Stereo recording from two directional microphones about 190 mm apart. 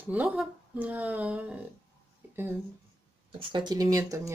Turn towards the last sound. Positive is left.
turn(degrees=-15)  # may be behind; listen again after turning